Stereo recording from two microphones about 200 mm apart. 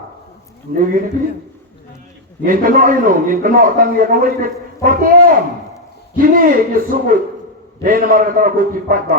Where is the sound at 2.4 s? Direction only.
45° right (ahead or behind).